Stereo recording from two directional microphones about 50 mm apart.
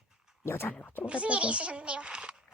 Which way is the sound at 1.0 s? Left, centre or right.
Right.